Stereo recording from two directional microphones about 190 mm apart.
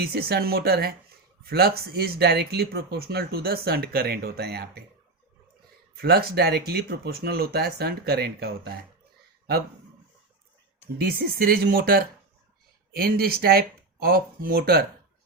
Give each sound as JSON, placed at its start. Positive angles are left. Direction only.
{"t": 0.0, "sound": "speech", "side_deg": -55}
{"t": 6.0, "sound": "speech", "side_deg": -55}
{"t": 10.9, "sound": "speech", "side_deg": -55}